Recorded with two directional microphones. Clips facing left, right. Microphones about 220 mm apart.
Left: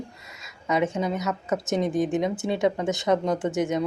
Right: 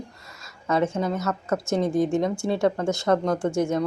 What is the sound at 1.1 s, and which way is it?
Speech, 20° left (ahead or behind).